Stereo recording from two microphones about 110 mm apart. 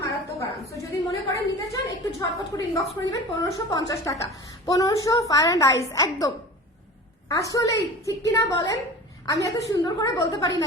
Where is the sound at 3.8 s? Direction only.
30° left (ahead or behind).